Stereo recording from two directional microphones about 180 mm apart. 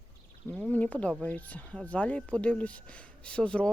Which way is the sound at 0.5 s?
10° left (ahead or behind).